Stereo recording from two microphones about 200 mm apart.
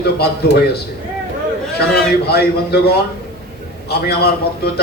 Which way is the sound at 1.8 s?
50° left (ahead or behind).